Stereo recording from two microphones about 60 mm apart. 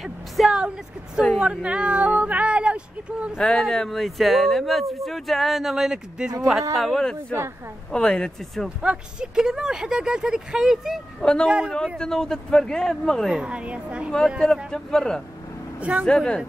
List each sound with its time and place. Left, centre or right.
0.0 s a sound: centre
1.4 s speech: centre
3.3 s speech: centre
6.7 s speech: centre
8.6 s speech: centre
11.1 s a woman's voice: centre
11.4 s speech: centre
12.0 s speech: centre
13.3 s speech: centre
14.7 s speech: centre
15.8 s speech: right
16.1 s speech: centre